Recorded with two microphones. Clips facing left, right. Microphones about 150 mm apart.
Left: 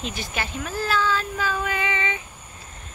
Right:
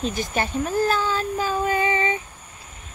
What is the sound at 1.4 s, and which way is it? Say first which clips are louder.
Female singing: right 4 dB; 40° right (ahead or behind).